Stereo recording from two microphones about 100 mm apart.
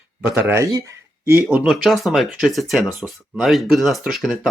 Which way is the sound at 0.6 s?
35° right (ahead or behind).